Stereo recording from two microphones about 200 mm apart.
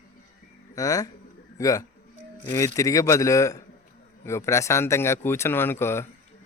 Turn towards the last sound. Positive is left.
turn(degrees=10)  # may be behind; listen again after turning